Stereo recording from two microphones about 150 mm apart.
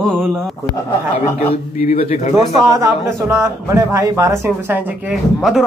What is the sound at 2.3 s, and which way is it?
A man's voice, 20° right (ahead or behind).